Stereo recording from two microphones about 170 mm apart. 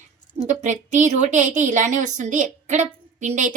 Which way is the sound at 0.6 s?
45° right (ahead or behind).